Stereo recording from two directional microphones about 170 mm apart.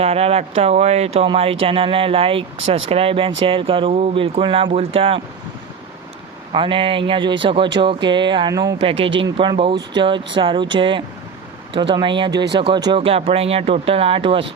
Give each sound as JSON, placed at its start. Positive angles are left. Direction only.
{"t": 0.0, "sound": "speech", "side_deg": -35}
{"t": 6.5, "sound": "speech", "side_deg": -30}
{"t": 8.8, "sound": "speech", "side_deg": -30}